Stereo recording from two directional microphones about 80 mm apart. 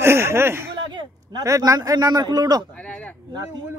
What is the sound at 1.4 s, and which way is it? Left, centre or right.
A man's voice, right.